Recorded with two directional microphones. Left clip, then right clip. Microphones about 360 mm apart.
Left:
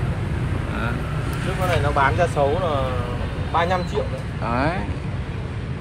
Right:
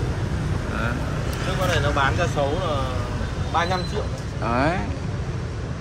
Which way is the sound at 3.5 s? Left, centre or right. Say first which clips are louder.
Left 2 dB; centre.